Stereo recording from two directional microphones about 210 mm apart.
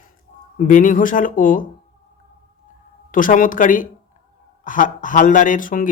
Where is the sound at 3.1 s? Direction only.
40° left (ahead or behind).